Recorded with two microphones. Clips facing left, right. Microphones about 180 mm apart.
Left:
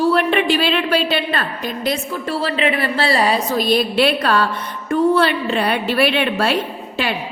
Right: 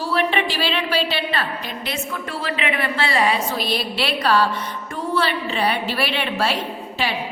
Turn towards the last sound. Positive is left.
turn(degrees=55)  # may be behind; listen again after turning